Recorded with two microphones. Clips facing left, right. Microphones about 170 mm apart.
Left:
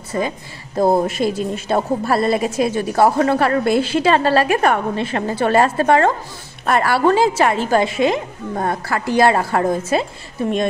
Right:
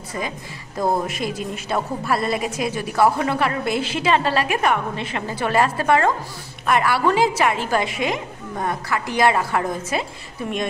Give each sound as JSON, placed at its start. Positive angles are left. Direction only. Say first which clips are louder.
{"t": 0.7, "sound": "a woman's voice", "louder": "left 6 dB", "side_deg": 30}